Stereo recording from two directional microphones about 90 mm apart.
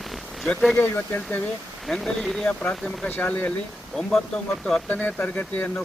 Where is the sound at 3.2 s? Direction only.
20° left (ahead or behind).